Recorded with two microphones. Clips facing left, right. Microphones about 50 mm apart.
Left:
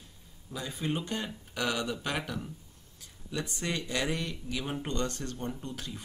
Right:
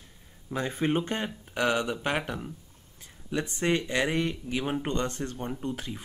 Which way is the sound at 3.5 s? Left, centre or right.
Right.